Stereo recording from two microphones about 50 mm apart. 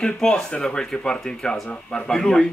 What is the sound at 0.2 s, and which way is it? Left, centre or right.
Speech, centre.